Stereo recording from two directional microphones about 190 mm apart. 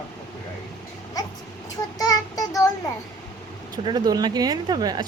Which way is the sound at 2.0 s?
20° left (ahead or behind).